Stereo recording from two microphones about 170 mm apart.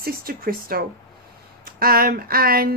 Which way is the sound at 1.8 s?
60° right (ahead or behind).